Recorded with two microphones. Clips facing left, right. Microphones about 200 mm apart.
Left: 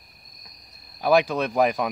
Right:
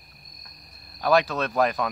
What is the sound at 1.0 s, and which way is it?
Speech, 10° left (ahead or behind).